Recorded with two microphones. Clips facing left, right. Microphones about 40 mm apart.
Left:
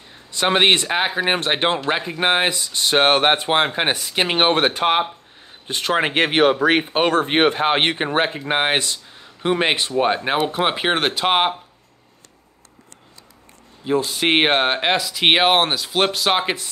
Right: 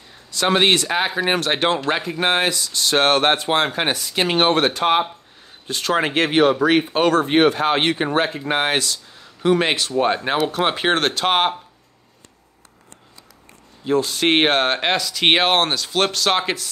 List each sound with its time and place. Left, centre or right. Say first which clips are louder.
0.3 s speech: even; left
5.7 s speech: even; left; by 11.5 s centre
13.8 s speech: right 1 dB; centre